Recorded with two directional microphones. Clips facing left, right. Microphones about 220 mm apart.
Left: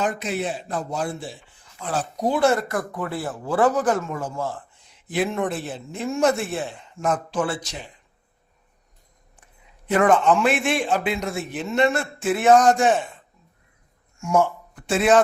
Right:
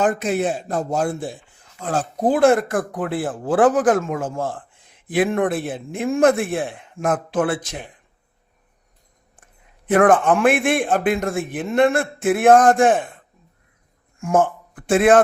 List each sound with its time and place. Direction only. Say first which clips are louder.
0.0 s a man's voice: right 6 dB; 50° right (ahead or behind)
2.9 s speech: right 5 dB; 90° right
4.2 s a man's voice: right 3 dB; 50° right (ahead or behind)
9.4 s a man's voice: even; 50° right (ahead or behind)